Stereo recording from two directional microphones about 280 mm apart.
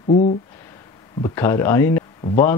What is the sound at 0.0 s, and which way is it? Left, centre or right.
Speech, left.